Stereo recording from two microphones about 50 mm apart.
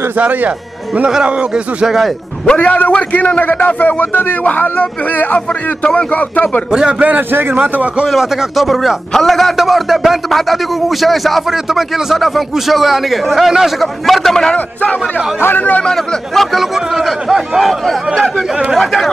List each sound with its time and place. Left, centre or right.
2.5 s a man's voice: left
6.7 s a man's voice: centre
7.0 s a man's voice: right
8.1 s speech: centre
15.5 s a man's voice: left
15.8 s speech: centre
16.5 s speech: centre